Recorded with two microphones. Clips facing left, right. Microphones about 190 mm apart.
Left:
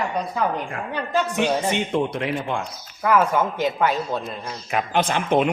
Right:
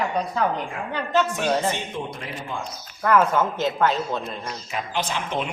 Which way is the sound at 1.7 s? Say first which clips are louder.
Left 8 dB; 70° left (ahead or behind).